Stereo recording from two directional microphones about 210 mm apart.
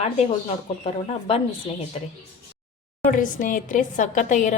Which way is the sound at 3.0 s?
40° left (ahead or behind).